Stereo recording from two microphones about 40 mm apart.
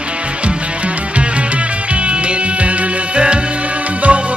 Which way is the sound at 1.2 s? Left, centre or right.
Right.